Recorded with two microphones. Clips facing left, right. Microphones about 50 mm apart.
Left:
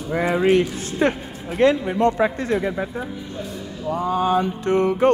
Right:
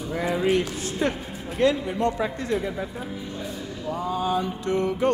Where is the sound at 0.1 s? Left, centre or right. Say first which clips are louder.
Left 6 dB; left.